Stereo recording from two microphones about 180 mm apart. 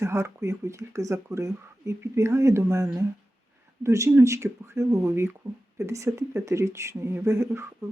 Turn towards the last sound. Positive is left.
turn(degrees=-15)  # may be behind; listen again after turning